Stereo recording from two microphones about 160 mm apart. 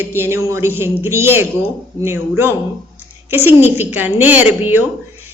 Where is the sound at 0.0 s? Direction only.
15° right (ahead or behind).